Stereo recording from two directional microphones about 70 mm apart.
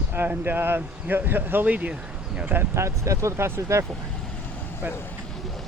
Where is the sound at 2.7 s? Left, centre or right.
Right.